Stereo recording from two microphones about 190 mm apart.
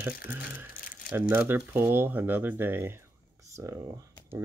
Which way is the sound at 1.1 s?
10° right (ahead or behind).